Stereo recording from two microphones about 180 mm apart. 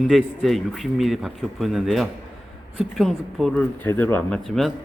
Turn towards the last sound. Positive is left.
turn(degrees=0)  # may be behind; listen again after turning